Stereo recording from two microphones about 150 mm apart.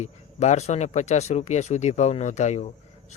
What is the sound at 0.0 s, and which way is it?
Speech, 50° left (ahead or behind).